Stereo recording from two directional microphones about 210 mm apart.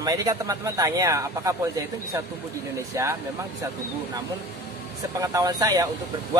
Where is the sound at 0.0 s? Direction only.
15° right (ahead or behind).